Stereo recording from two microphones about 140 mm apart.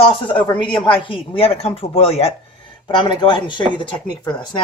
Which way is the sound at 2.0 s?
45° left (ahead or behind).